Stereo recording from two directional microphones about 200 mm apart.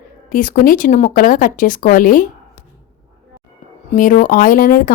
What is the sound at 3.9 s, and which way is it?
Speech, 40° left (ahead or behind).